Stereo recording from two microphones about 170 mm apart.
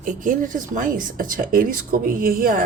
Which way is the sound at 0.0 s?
50° right (ahead or behind).